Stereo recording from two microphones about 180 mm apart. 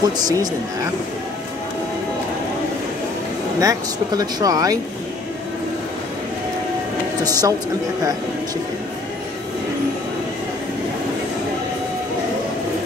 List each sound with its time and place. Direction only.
0.0 s speech: 20° right (ahead or behind)
3.5 s speech: 20° right (ahead or behind)
7.2 s speech: 20° right (ahead or behind)